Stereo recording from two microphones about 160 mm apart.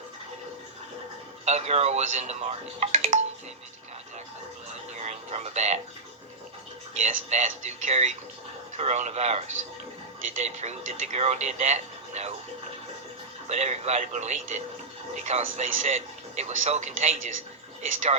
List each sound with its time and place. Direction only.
1.5 s speech: 45° right (ahead or behind)
4.7 s a sound: 45° right (ahead or behind)
6.9 s speech: 45° right (ahead or behind)
13.5 s speech: 45° right (ahead or behind)